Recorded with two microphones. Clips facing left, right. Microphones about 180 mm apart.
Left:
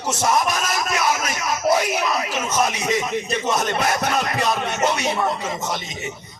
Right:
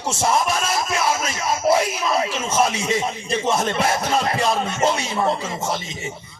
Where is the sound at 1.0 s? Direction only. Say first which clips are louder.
Even; 30° right (ahead or behind).